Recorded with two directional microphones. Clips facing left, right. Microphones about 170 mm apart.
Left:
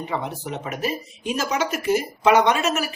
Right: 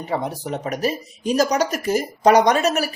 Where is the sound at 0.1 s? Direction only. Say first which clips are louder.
Right 7 dB; 40° right (ahead or behind).